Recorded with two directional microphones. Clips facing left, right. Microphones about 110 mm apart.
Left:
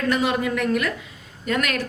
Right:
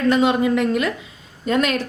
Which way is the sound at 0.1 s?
25° right (ahead or behind).